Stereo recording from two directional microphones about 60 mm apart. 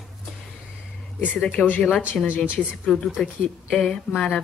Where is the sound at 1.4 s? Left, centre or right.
Centre.